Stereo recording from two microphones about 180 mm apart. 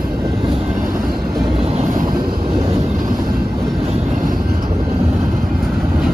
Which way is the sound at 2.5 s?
30° right (ahead or behind).